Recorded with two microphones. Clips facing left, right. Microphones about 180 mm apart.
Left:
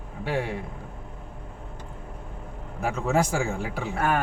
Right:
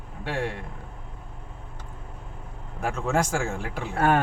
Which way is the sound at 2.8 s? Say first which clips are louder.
Left 1 dB; 5° left (ahead or behind).